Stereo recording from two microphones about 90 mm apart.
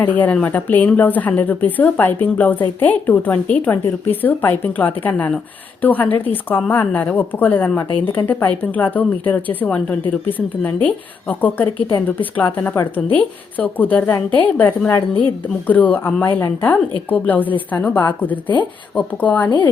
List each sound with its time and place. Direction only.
0.0 s a woman's voice: 20° left (ahead or behind)
19.5 s speech: 55° left (ahead or behind)